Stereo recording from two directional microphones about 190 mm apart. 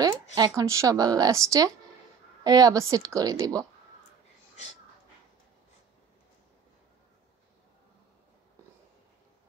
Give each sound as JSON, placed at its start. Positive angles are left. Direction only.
{"t": 0.0, "sound": "a woman's voice", "side_deg": -20}